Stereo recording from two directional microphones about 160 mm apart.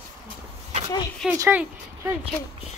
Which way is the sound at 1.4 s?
10° right (ahead or behind).